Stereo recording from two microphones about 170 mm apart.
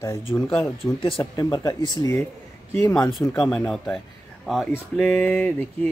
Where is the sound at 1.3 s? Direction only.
20° left (ahead or behind).